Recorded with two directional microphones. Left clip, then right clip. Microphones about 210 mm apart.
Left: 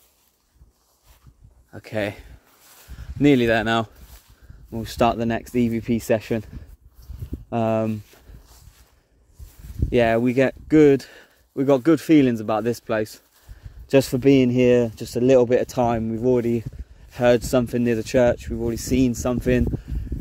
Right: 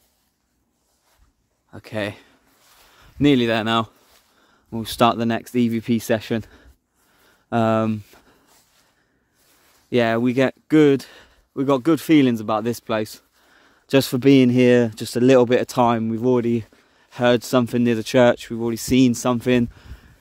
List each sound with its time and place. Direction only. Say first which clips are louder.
1.7 s speech: left 1 dB; 10° right (ahead or behind)
4.6 s speech: right 2 dB; 25° right (ahead or behind)
9.8 s speech: left 1 dB; 15° right (ahead or behind)